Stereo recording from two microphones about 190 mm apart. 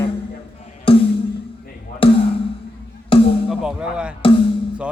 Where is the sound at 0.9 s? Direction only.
30° left (ahead or behind).